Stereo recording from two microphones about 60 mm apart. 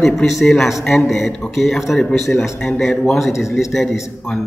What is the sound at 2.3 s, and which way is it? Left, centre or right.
A man's voice, centre.